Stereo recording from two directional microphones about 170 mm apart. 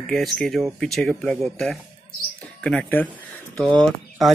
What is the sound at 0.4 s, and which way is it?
Speech, centre (ahead or behind).